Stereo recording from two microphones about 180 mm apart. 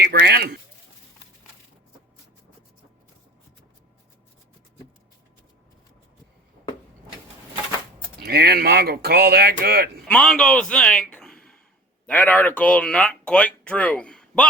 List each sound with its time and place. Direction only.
0.0 s speech: 65° right (ahead or behind)
8.2 s speech: 60° right (ahead or behind)
10.1 s a man's voice: 5° left (ahead or behind)